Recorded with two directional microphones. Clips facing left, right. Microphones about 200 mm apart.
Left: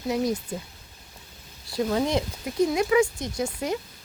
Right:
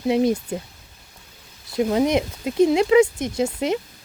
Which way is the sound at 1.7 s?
20° right (ahead or behind).